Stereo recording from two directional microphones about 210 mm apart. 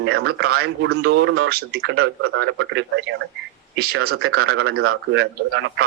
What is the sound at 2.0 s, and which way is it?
A man's voice, 70° right (ahead or behind).